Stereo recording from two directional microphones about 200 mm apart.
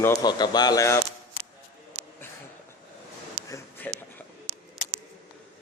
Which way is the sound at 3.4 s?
15° left (ahead or behind).